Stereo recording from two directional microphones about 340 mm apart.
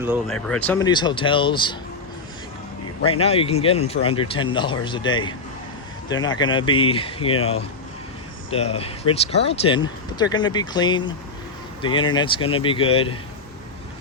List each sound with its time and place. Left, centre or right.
0.0 s speech: centre
3.0 s speech: centre
6.4 s speech: centre
8.4 s speech: centre